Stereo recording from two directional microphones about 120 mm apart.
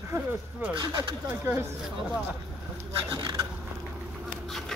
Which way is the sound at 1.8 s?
5° right (ahead or behind).